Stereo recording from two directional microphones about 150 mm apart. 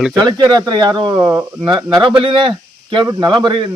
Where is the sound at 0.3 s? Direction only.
30° right (ahead or behind).